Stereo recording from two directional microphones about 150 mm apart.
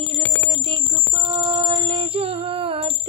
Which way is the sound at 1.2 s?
35° right (ahead or behind).